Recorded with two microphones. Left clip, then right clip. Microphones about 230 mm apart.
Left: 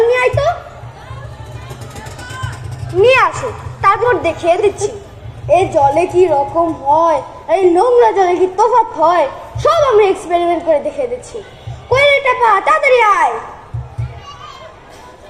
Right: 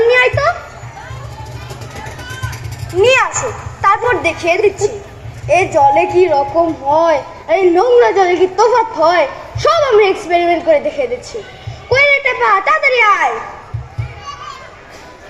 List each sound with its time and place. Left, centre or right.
0.1 s children playing: right
2.5 s a sound: left
3.8 s a woman's voice: left
5.5 s a woman's voice: right